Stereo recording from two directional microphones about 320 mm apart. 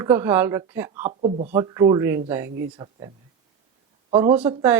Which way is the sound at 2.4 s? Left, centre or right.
Right.